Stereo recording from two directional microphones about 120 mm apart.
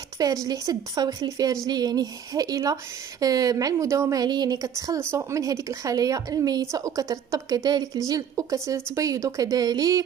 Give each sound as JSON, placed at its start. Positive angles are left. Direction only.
{"t": 0.5, "sound": "speech", "side_deg": -30}